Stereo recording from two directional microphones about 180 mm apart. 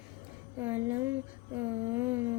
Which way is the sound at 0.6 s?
10° right (ahead or behind).